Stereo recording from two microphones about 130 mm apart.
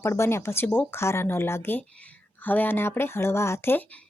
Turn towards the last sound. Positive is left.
turn(degrees=15)  # may be behind; listen again after turning